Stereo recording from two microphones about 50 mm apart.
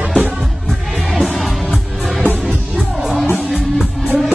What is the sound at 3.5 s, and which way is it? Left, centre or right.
Music, centre.